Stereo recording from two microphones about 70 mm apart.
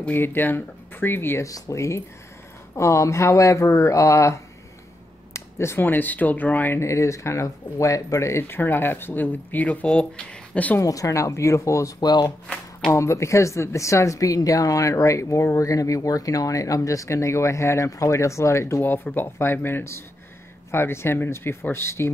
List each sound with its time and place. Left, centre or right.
0.0 s speech: left
1.4 s speech: left
5.3 s a sound: left
5.8 s speech: left
6.8 s speech: left; by 10.8 s centre
10.8 s speech: left
12.0 s speech: left
12.9 s speech: left